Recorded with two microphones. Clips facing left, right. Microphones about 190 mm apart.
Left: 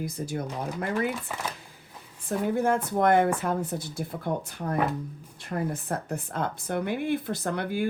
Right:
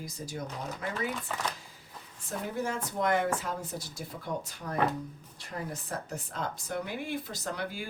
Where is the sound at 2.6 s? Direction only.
55° left (ahead or behind).